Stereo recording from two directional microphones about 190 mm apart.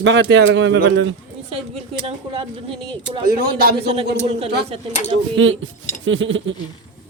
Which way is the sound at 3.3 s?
55° right (ahead or behind).